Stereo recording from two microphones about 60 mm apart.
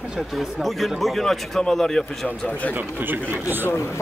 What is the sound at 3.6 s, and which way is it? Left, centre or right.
Speech, left.